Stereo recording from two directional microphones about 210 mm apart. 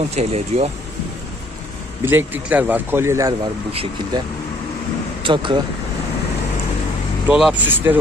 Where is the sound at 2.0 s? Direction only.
10° right (ahead or behind).